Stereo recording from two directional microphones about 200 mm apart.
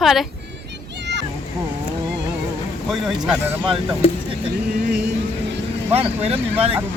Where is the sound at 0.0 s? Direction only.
Centre (ahead or behind).